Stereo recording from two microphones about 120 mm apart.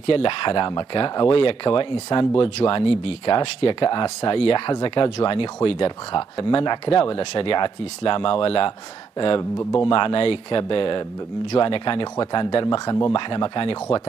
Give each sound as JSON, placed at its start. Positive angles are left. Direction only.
{"t": 0.0, "sound": "speech", "side_deg": 45}
{"t": 3.3, "sound": "speech", "side_deg": 40}
{"t": 9.8, "sound": "speech", "side_deg": 40}